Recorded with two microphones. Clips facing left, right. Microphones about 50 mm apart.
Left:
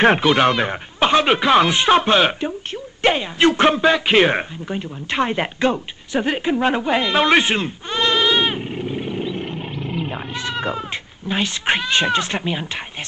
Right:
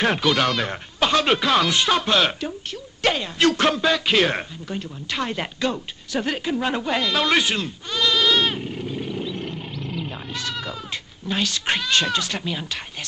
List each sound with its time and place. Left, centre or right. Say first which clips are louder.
0.0 s speech: left 6 dB; left